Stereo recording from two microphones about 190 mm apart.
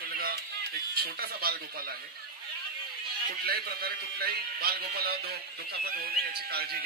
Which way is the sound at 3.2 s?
55° right (ahead or behind).